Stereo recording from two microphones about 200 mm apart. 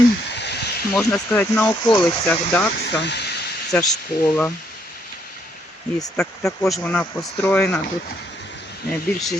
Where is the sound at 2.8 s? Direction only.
60° left (ahead or behind).